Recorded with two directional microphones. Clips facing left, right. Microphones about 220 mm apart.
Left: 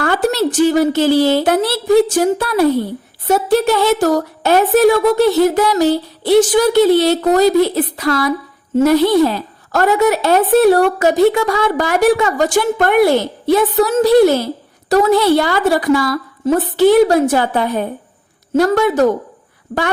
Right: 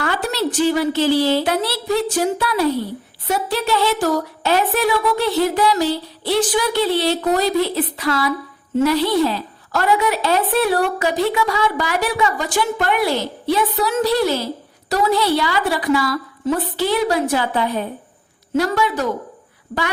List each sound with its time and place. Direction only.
0.0 s a woman's voice: 45° left (ahead or behind)